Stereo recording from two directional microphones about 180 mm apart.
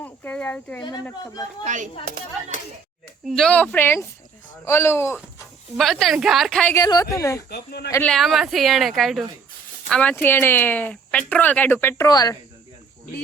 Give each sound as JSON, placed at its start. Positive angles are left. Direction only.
{"t": 0.0, "sound": "speech", "side_deg": 10}
{"t": 1.6, "sound": "speech", "side_deg": -45}
{"t": 3.2, "sound": "speech", "side_deg": 5}
{"t": 5.7, "sound": "a woman's voice", "side_deg": 0}
{"t": 6.7, "sound": "speech", "side_deg": 20}
{"t": 7.5, "sound": "speech", "side_deg": 65}
{"t": 8.0, "sound": "a woman's voice", "side_deg": 0}